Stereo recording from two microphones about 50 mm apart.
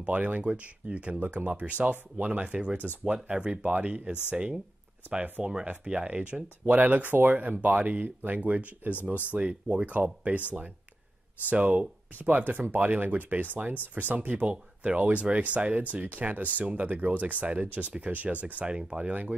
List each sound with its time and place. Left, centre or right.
0.0 s speech: right
1.2 s speech: right; by 5.7 s centre
5.7 s speech: right
11.5 s speech: right
14.4 s speech: right